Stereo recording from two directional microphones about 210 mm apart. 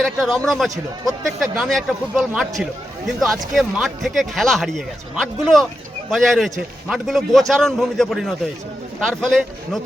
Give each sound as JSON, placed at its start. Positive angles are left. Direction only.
{"t": 0.0, "sound": "speech", "side_deg": 0}
{"t": 3.5, "sound": "speech", "side_deg": 0}